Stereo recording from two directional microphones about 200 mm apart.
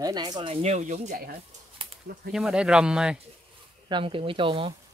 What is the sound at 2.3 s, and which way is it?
Speech, 5° right (ahead or behind).